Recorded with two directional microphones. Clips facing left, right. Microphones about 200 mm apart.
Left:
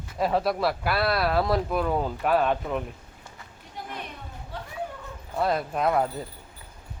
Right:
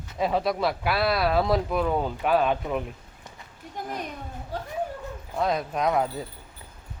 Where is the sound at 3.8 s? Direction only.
45° right (ahead or behind).